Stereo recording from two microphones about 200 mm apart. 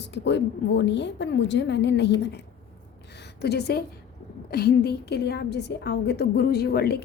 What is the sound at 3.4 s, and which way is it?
A woman's voice, 55° left (ahead or behind).